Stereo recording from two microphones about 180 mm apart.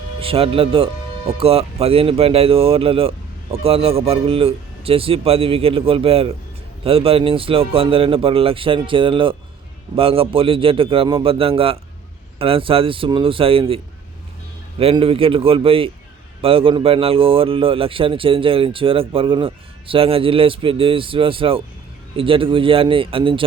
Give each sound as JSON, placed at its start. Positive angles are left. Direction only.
{"t": 0.2, "sound": "a man's voice", "side_deg": -30}